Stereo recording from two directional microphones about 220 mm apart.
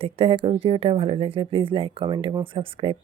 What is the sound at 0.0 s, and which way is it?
Speech, 25° right (ahead or behind).